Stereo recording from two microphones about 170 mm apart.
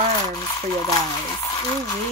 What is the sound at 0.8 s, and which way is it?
Speech, 20° left (ahead or behind).